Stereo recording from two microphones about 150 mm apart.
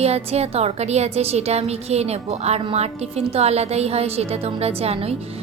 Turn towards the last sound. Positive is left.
turn(degrees=-40)  # may be behind; listen again after turning